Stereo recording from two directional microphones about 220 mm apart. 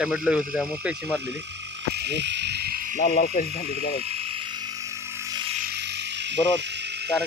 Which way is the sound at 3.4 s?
25° right (ahead or behind).